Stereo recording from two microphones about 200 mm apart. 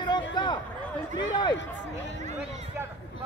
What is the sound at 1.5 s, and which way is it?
Speech, 60° left (ahead or behind).